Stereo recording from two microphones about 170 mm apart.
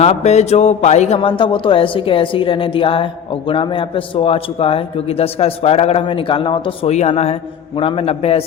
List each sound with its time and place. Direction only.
0.0 s speech: 40° left (ahead or behind)